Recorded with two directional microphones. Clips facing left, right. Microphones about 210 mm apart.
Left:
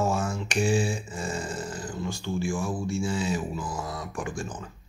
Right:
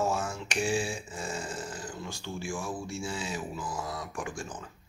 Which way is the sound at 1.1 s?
5° right (ahead or behind).